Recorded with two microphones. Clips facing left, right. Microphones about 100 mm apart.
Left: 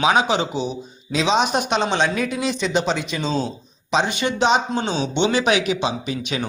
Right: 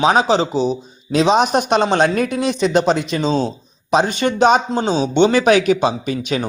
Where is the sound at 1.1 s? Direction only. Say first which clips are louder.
Right 5 dB; 50° right (ahead or behind).